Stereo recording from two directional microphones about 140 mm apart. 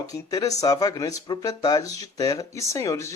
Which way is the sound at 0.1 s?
25° left (ahead or behind).